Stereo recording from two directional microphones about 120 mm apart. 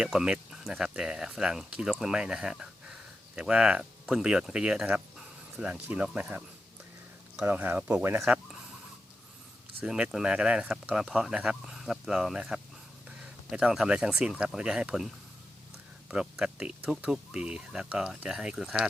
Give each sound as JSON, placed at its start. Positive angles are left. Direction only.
{"t": 0.0, "sound": "speech", "side_deg": -5}
{"t": 7.4, "sound": "speech", "side_deg": -15}
{"t": 9.8, "sound": "speech", "side_deg": -5}